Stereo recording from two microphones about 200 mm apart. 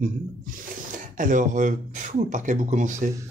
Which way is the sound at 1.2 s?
40° right (ahead or behind).